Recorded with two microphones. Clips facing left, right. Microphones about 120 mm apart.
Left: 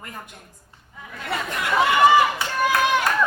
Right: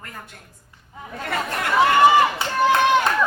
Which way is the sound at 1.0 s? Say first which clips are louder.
Right 5 dB; 30° right (ahead or behind).